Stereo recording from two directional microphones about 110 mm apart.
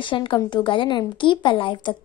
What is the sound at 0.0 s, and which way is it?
A woman's voice, 45° left (ahead or behind).